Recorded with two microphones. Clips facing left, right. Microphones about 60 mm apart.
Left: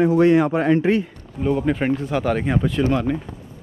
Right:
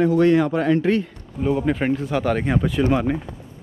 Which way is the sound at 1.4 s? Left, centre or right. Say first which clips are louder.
Even; centre.